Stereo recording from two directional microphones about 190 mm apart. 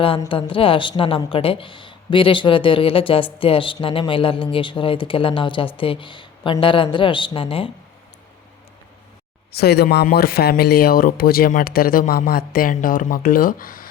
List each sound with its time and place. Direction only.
0.2 s speech: 25° left (ahead or behind)
9.5 s speech: 60° left (ahead or behind)